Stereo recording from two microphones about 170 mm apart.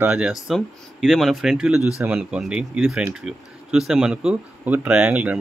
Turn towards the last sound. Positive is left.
turn(degrees=-10)  # may be behind; listen again after turning